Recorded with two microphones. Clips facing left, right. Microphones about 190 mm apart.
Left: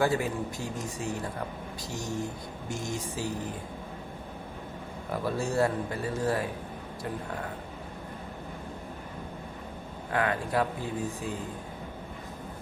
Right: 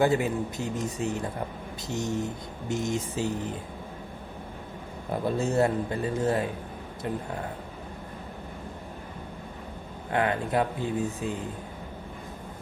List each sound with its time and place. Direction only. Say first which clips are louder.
0.0 s speech: right 3 dB; 20° right (ahead or behind)
5.1 s speech: right 3 dB; 20° right (ahead or behind)
10.1 s speech: right 2 dB; 25° right (ahead or behind)